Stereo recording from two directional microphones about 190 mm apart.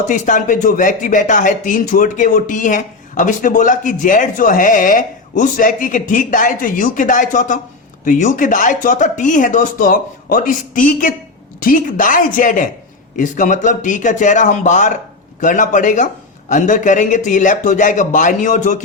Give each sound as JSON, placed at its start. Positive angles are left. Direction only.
{"t": 0.1, "sound": "a man's voice", "side_deg": 45}